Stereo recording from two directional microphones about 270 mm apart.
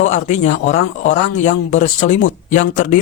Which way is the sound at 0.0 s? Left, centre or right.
Left.